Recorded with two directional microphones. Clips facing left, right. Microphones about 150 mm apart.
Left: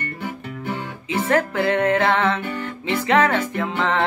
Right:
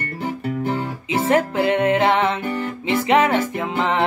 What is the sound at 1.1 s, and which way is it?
Music, 20° right (ahead or behind).